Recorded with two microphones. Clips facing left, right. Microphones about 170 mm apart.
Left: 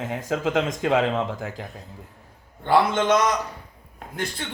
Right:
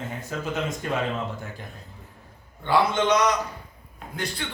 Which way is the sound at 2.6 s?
50° left (ahead or behind).